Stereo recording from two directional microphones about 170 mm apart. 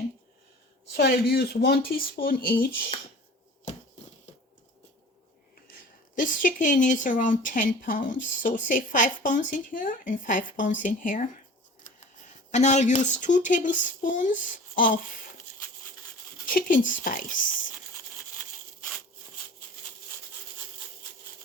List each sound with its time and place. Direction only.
0.9 s speech: 65° left (ahead or behind)
6.1 s speech: 50° left (ahead or behind)
16.5 s speech: 55° left (ahead or behind)